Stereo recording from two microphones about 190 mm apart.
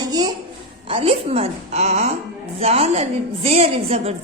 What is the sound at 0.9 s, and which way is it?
A woman's voice, 30° right (ahead or behind).